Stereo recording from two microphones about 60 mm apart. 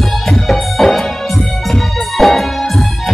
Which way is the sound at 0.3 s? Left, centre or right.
Centre.